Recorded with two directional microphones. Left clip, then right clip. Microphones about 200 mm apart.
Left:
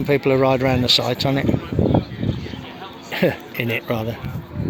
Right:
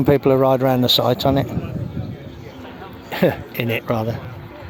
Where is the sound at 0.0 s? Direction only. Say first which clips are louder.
Right 2 dB; 20° right (ahead or behind).